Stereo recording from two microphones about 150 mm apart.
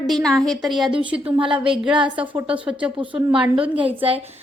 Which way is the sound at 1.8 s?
5° right (ahead or behind).